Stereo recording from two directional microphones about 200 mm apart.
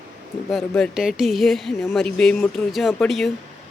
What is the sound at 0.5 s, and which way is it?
Speech, centre (ahead or behind).